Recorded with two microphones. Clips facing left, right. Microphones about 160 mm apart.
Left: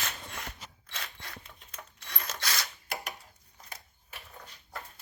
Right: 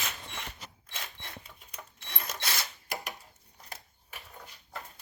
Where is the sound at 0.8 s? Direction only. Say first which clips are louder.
Left 1 dB; 20° right (ahead or behind).